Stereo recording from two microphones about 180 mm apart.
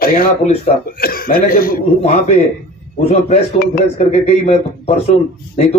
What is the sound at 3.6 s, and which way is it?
Speech, 55° left (ahead or behind).